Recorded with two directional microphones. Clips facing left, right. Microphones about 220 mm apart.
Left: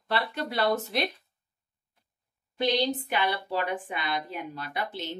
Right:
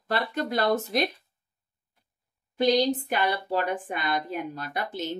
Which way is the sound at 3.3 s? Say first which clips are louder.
Right 3 dB; 45° right (ahead or behind).